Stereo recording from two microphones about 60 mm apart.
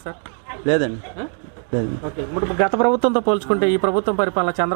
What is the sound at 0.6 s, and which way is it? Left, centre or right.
Speech, right.